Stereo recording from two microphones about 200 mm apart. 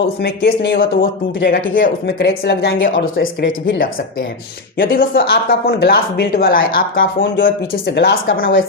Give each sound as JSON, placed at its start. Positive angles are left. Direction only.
{"t": 0.2, "sound": "a man's voice", "side_deg": 55}
{"t": 4.8, "sound": "a man's voice", "side_deg": 45}